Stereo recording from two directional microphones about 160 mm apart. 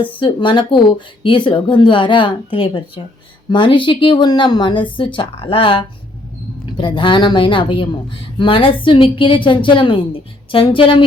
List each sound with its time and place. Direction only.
0.0 s speech: 30° left (ahead or behind)